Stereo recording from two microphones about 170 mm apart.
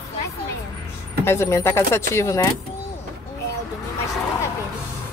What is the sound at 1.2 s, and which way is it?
Speech, 15° left (ahead or behind).